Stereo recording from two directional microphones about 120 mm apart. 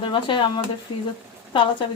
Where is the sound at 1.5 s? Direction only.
40° left (ahead or behind).